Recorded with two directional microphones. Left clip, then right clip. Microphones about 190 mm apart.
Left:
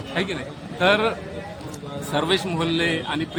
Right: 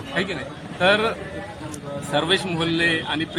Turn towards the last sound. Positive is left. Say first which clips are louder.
# right 2 dB
turn(degrees=0)  # may be behind; listen again after turning